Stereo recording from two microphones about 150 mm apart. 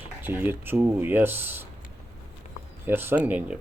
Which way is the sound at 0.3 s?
15° right (ahead or behind).